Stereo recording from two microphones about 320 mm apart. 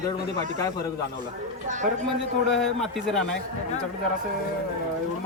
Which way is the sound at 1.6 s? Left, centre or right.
Right.